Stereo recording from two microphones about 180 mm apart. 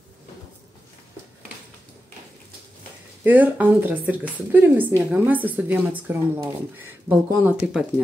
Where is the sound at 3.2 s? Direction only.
10° right (ahead or behind).